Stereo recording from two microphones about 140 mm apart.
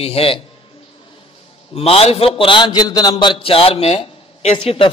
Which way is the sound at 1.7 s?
45° left (ahead or behind).